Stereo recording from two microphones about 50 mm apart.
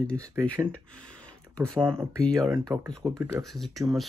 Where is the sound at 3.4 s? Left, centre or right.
Centre.